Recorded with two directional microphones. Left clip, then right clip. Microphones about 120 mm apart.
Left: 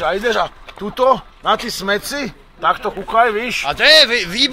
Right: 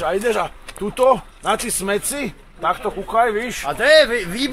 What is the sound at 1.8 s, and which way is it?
Speech, 10° right (ahead or behind).